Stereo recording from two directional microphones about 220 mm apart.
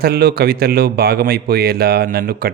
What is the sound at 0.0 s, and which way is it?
Speech, 45° right (ahead or behind).